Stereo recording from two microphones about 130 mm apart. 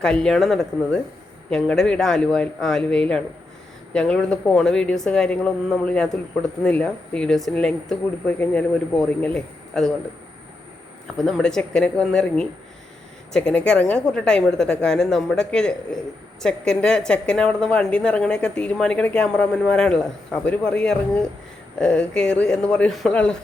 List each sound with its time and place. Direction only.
0.0 s a woman's voice: 5° left (ahead or behind)
9.0 s a woman's voice: 10° left (ahead or behind)
11.2 s a woman's voice: 5° left (ahead or behind)